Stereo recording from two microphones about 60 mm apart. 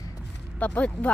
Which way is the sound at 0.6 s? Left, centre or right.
Left.